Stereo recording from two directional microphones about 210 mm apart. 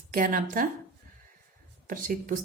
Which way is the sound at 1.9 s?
40° right (ahead or behind).